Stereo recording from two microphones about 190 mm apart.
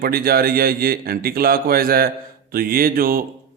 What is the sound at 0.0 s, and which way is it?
Speech, 50° right (ahead or behind).